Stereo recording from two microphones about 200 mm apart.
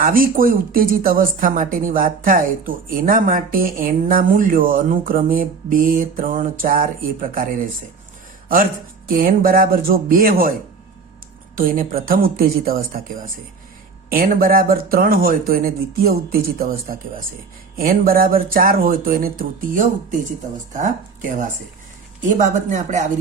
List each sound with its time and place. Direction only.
0.0 s speech: 45° right (ahead or behind)
9.0 s speech: 45° right (ahead or behind)
11.5 s speech: 45° right (ahead or behind)